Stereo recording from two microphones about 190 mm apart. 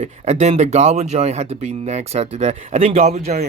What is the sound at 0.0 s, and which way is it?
Speech, 35° right (ahead or behind).